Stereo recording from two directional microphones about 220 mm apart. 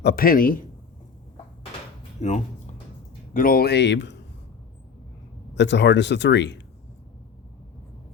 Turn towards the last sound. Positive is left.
turn(degrees=55)  # may be behind; listen again after turning